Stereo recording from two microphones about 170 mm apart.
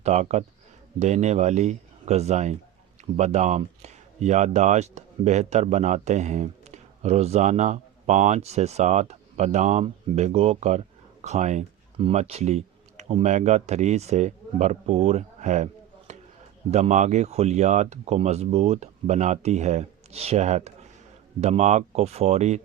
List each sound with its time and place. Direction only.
0.0 s speech: 40° right (ahead or behind)